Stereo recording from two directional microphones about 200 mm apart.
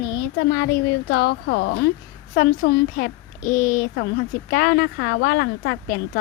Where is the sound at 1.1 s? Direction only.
60° left (ahead or behind).